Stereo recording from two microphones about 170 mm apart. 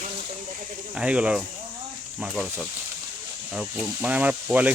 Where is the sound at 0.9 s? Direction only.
5° right (ahead or behind).